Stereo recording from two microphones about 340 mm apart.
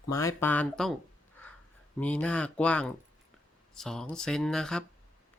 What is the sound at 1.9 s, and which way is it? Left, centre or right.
Speech, centre.